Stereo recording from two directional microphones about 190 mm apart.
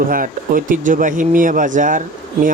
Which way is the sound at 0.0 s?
45° right (ahead or behind).